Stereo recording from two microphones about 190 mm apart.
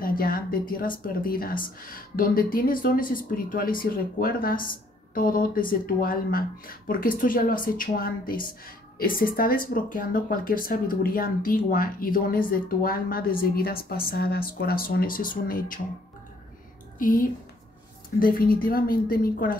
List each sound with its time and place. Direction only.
0.0 s speech: 50° left (ahead or behind)
17.0 s speech: 45° left (ahead or behind)